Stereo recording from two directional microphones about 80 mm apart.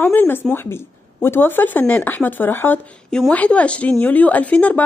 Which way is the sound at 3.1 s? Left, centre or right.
Centre.